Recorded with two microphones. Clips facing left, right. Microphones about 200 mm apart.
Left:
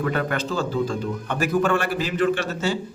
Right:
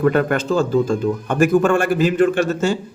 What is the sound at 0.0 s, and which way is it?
Speech, 50° right (ahead or behind).